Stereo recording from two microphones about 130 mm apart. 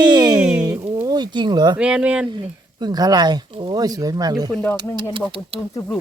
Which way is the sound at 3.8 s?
30° right (ahead or behind).